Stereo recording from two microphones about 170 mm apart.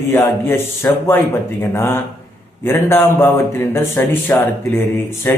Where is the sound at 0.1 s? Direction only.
15° left (ahead or behind).